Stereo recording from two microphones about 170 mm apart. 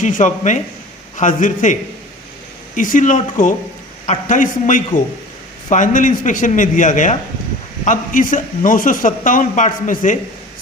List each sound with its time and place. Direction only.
0.0 s a man's voice: 50° left (ahead or behind)